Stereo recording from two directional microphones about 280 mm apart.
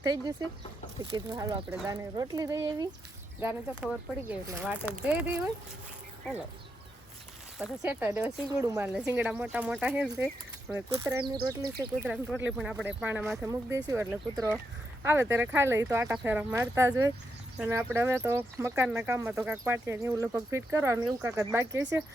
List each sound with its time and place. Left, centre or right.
0.0 s speech: centre
7.6 s speech: centre